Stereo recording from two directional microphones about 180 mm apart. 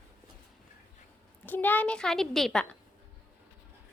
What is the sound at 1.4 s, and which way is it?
A woman's voice, 10° left (ahead or behind).